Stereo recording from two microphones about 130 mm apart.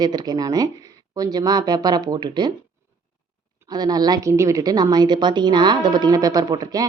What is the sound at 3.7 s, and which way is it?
A woman's voice, 30° right (ahead or behind).